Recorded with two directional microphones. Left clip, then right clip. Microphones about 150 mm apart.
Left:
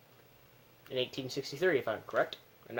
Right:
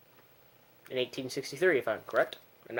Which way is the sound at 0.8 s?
30° right (ahead or behind).